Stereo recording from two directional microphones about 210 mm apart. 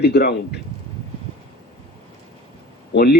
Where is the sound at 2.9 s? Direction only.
50° left (ahead or behind).